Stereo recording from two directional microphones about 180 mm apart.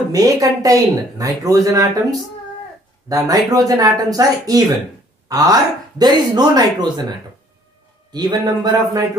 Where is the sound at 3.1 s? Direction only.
20° right (ahead or behind).